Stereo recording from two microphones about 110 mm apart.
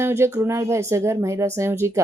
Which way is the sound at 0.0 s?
25° right (ahead or behind).